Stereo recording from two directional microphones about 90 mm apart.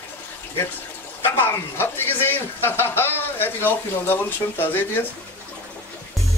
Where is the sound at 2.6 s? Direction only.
25° left (ahead or behind).